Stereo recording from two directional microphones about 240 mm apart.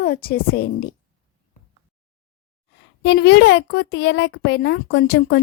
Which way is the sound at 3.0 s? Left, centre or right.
Left.